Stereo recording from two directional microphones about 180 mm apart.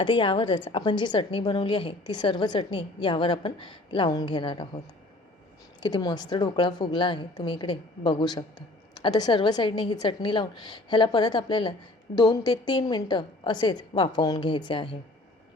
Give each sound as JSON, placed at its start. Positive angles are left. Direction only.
{"t": 0.0, "sound": "a woman's voice", "side_deg": 25}
{"t": 5.8, "sound": "a woman's voice", "side_deg": 25}